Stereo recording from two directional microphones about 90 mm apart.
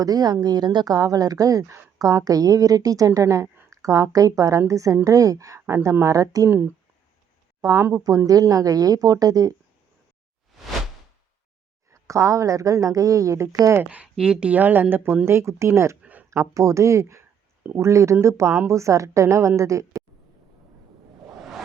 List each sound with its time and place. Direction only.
0.0 s speech: 45° right (ahead or behind); by 2.0 s 30° right (ahead or behind)
2.0 s a woman's voice: 40° right (ahead or behind)
6.5 s a woman's voice: 20° right (ahead or behind)
8.3 s speech: 40° right (ahead or behind)
11.9 s a woman's voice: 35° right (ahead or behind)
13.9 s a woman's voice: 10° right (ahead or behind); by 20.0 s 35° right (ahead or behind)